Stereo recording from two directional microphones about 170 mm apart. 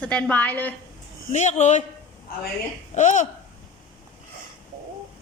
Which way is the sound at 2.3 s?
60° left (ahead or behind).